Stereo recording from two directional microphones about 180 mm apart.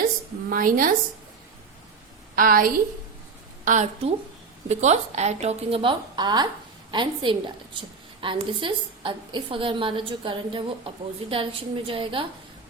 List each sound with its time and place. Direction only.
0.5 s a woman's voice: 50° right (ahead or behind)
2.3 s a woman's voice: 50° right (ahead or behind); by 12.2 s 30° right (ahead or behind)